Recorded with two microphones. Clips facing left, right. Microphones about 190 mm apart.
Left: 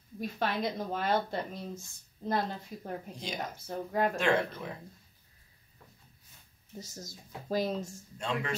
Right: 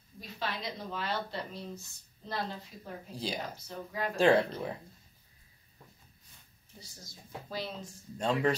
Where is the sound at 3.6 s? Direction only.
50° left (ahead or behind).